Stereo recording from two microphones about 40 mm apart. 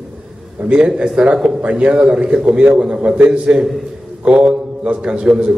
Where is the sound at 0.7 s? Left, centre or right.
Right.